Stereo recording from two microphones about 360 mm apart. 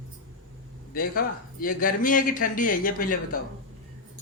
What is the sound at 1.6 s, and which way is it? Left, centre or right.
Speech, left.